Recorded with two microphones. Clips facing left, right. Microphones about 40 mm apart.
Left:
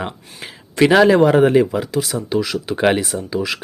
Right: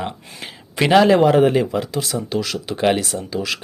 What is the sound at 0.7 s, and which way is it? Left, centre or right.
Speech, centre.